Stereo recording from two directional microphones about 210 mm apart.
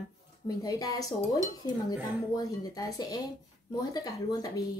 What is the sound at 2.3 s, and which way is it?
A woman's voice, 15° left (ahead or behind).